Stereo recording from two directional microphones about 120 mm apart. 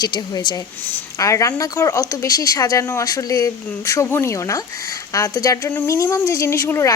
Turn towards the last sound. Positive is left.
turn(degrees=25)  # may be behind; listen again after turning